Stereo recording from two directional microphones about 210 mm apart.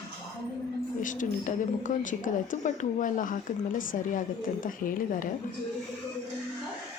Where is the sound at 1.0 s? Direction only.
40° left (ahead or behind).